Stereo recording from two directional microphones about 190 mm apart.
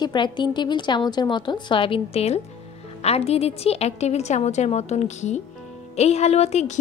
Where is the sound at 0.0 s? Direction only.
25° left (ahead or behind).